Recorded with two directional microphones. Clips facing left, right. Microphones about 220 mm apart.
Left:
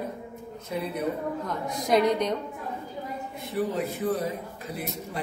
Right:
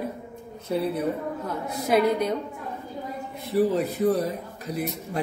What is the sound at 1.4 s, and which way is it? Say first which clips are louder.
Speech: right 1 dB; 5° right (ahead or behind).